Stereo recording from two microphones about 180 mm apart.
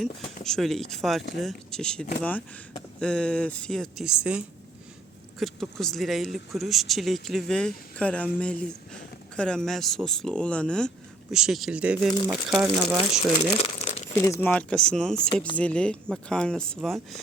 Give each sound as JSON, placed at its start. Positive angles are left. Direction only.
{"t": 0.4, "sound": "speech", "side_deg": 0}
{"t": 13.6, "sound": "crumpling", "side_deg": 35}
{"t": 14.2, "sound": "speech", "side_deg": 15}